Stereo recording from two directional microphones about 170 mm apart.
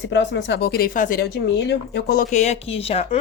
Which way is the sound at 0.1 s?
90° left.